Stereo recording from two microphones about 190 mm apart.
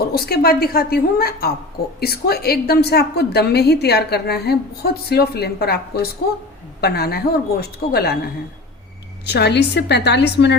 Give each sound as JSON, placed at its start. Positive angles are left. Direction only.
{"t": 0.0, "sound": "a woman's voice", "side_deg": 55}
{"t": 9.2, "sound": "a woman's voice", "side_deg": 60}